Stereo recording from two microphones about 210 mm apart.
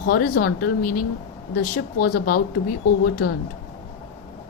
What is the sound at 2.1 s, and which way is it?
Speech, 45° left (ahead or behind).